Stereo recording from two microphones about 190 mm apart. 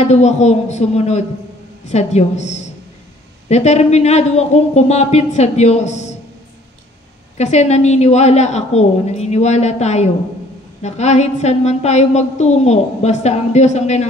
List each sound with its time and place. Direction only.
0.0 s a woman's voice: 35° left (ahead or behind)
7.3 s a woman's voice: 35° left (ahead or behind)